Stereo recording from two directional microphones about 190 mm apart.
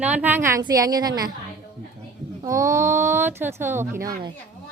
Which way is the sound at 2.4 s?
15° right (ahead or behind).